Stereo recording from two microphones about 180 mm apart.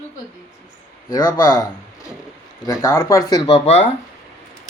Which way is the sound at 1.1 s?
20° left (ahead or behind).